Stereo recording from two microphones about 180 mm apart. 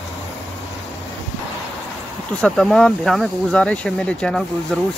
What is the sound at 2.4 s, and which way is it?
Speech, centre (ahead or behind).